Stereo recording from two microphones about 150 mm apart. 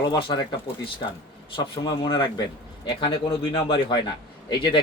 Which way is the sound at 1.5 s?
30° left (ahead or behind).